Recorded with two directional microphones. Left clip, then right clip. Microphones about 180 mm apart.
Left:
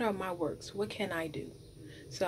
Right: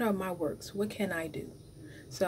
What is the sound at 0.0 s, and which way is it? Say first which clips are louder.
A woman's voice: right 1 dB; 20° right (ahead or behind).